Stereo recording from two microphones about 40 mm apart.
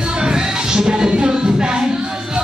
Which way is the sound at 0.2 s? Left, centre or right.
Centre.